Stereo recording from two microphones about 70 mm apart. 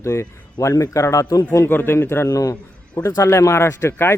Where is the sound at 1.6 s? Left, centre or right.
Left.